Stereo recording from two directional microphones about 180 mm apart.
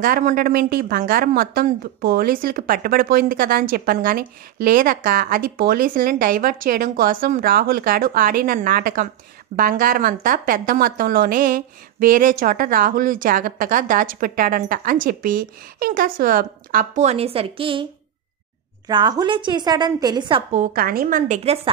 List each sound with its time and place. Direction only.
0.0 s a woman's voice: 50° right (ahead or behind); by 17.8 s 30° right (ahead or behind)
18.9 s a woman's voice: 25° right (ahead or behind)
20.5 s a woman's voice: 50° right (ahead or behind)